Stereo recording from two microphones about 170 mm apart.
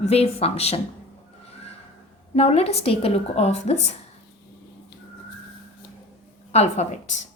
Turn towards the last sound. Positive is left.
turn(degrees=40)  # may be behind; listen again after turning